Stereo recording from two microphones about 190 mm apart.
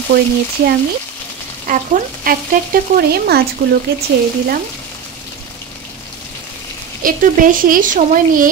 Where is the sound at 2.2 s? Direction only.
50° right (ahead or behind).